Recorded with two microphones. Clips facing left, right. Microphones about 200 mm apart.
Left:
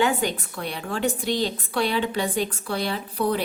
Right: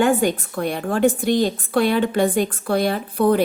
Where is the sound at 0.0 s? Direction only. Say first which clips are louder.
Right 6 dB; 50° right (ahead or behind).